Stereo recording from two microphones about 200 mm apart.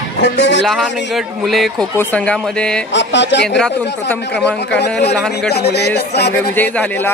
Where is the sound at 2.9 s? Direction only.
60° left (ahead or behind).